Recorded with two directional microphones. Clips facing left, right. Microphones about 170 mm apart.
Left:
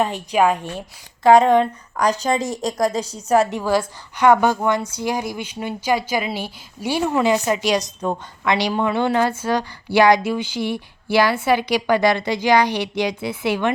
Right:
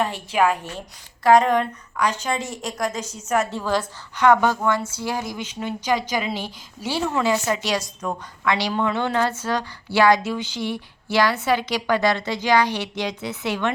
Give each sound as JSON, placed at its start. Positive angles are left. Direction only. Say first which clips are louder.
{"t": 0.0, "sound": "speech", "louder": "left 3 dB", "side_deg": 15}
{"t": 1.2, "sound": "a woman's voice", "louder": "left 4 dB", "side_deg": 30}
{"t": 3.5, "sound": "speech", "louder": "left 4 dB", "side_deg": 10}